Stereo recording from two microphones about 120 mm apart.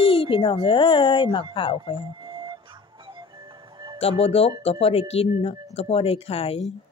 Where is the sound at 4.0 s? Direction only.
55° left (ahead or behind).